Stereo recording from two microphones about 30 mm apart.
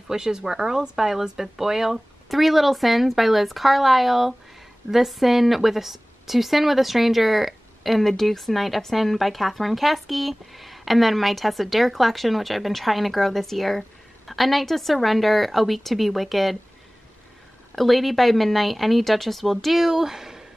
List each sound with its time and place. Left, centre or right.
0.1 s speech: right
2.2 s a woman's voice: centre
17.7 s a woman's voice: centre
19.9 s speech: centre